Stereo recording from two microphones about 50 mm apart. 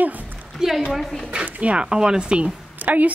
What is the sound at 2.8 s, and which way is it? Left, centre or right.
Speech, right.